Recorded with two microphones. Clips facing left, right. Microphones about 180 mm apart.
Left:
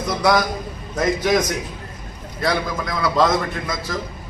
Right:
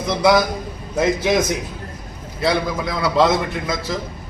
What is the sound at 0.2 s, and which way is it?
Speech, 5° right (ahead or behind).